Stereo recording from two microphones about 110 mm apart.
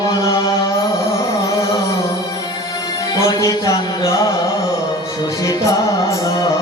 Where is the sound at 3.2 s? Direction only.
35° left (ahead or behind).